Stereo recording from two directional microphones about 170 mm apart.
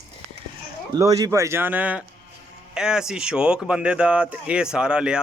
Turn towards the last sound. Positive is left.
turn(degrees=-5)  # may be behind; listen again after turning